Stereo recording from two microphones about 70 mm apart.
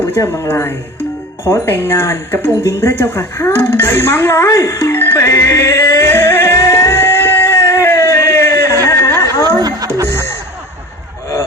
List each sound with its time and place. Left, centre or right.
0.3 s speech: left
6.6 s a sound: left
9.6 s music: right